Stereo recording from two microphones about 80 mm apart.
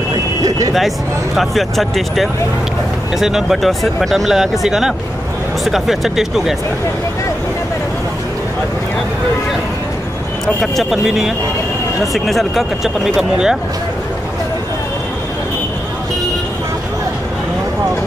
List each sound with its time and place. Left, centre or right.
0.4 s a sound: right
0.7 s speech: centre
10.4 s speech: centre